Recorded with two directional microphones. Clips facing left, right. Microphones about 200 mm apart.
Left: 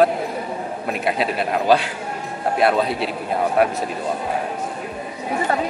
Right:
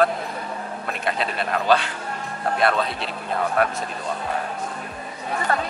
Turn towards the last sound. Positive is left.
turn(degrees=5)  # may be behind; listen again after turning